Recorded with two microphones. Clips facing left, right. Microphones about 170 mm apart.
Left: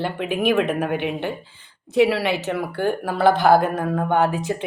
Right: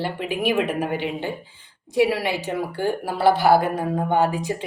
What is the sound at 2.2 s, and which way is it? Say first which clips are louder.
Speech: left 3 dB; 15° right (ahead or behind).